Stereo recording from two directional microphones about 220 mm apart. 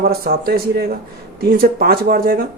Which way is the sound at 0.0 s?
45° right (ahead or behind).